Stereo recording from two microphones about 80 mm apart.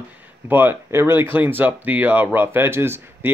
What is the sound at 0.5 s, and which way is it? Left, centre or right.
Speech, right.